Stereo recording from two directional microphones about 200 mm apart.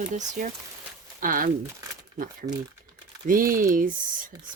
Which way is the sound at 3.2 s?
45° right (ahead or behind).